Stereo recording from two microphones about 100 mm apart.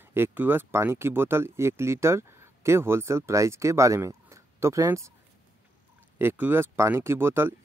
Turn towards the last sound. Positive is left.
turn(degrees=-25)  # may be behind; listen again after turning